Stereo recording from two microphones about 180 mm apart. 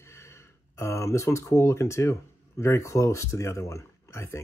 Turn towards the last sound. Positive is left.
turn(degrees=15)  # may be behind; listen again after turning